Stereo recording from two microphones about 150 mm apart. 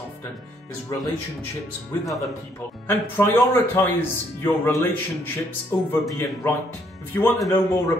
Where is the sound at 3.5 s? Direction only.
15° left (ahead or behind).